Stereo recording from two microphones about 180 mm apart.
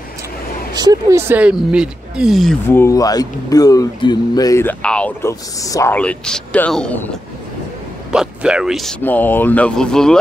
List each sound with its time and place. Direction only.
0.7 s speech: 20° right (ahead or behind)
1.3 s speech: 5° right (ahead or behind)
2.7 s speech: 15° left (ahead or behind)
5.6 s speech: 20° left (ahead or behind)
5.9 s speech: 5° left (ahead or behind)
8.1 s speech: 5° right (ahead or behind)
9.0 s speech: 10° left (ahead or behind)